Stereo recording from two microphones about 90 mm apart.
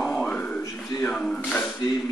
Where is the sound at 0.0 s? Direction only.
10° left (ahead or behind).